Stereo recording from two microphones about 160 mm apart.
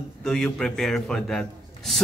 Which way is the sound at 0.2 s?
5° left (ahead or behind).